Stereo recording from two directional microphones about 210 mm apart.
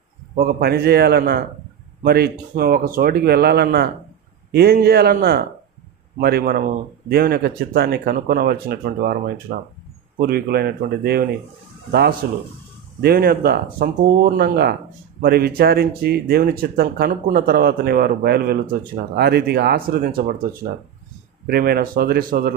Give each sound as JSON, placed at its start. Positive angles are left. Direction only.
{"t": 0.6, "sound": "speech", "side_deg": -50}
{"t": 21.5, "sound": "speech", "side_deg": -45}